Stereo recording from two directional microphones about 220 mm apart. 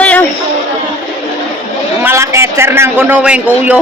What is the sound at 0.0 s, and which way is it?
Chatter, 5° left (ahead or behind).